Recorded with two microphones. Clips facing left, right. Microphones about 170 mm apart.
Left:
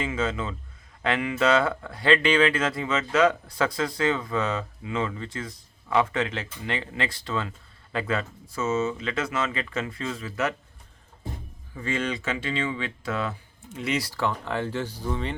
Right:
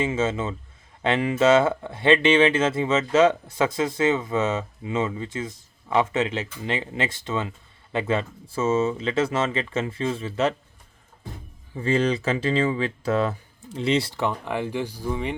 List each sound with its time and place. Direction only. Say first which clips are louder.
0.0 s speech: right 4 dB; 25° right (ahead or behind)
11.7 s speech: right 7 dB; 30° right (ahead or behind); by 15.4 s 15° right (ahead or behind)